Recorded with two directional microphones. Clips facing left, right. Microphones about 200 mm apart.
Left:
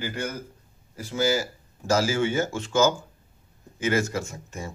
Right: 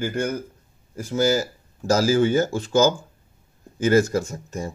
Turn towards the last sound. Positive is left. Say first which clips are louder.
# right 6 dB
turn(degrees=-40)  # may be behind; listen again after turning